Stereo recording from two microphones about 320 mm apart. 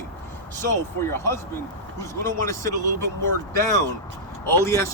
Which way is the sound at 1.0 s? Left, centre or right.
Centre.